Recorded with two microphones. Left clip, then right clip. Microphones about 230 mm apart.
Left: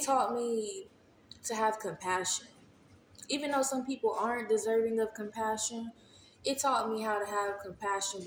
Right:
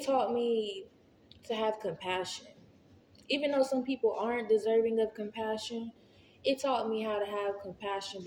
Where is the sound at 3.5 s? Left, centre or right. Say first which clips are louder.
Right 2 dB; left.